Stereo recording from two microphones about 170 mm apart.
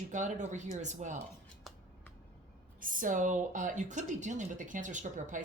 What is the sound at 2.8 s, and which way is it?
Speech, 50° right (ahead or behind).